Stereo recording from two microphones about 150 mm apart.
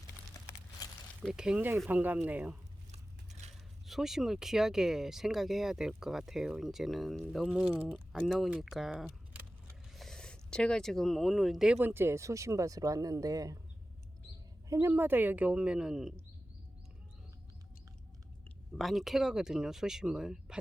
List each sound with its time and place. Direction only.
0.3 s a sound: 20° left (ahead or behind)
1.2 s speech: 5° right (ahead or behind)
9.0 s keys jangling: 10° right (ahead or behind)
9.9 s speech: centre (ahead or behind); by 13.6 s 25° right (ahead or behind)
14.7 s speech: 20° right (ahead or behind)
18.8 s speech: centre (ahead or behind)